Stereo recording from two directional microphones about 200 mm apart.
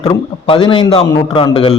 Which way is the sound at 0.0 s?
25° left (ahead or behind).